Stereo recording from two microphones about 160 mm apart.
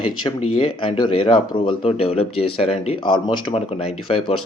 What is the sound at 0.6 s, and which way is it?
Speech, 30° left (ahead or behind).